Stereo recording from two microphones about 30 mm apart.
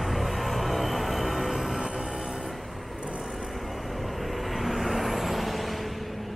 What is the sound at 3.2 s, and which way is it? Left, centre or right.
Vehicle, centre.